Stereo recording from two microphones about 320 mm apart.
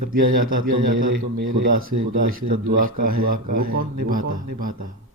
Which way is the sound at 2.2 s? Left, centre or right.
Right.